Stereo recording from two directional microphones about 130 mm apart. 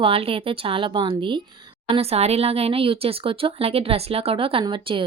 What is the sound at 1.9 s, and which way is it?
A woman's voice, 50° right (ahead or behind).